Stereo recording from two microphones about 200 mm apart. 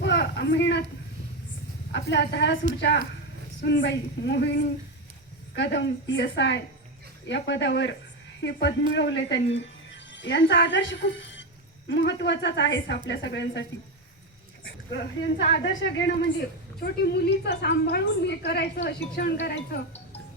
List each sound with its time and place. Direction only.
0.0 s a sound: 60° left (ahead or behind)
1.9 s a woman's voice: 60° left (ahead or behind)
3.6 s a woman's voice: 60° left (ahead or behind)
15.4 s a woman's voice: 65° left (ahead or behind)